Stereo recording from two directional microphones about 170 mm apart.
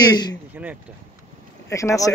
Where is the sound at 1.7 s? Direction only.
20° left (ahead or behind).